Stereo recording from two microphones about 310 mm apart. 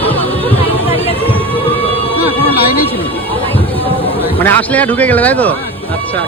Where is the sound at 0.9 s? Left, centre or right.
Centre.